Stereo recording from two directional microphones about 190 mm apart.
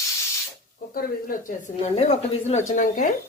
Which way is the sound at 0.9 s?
45° left (ahead or behind).